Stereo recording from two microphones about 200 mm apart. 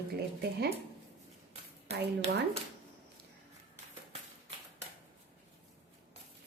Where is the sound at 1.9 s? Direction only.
30° right (ahead or behind).